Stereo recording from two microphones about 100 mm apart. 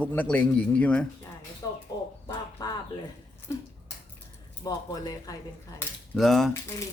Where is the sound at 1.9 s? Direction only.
45° left (ahead or behind).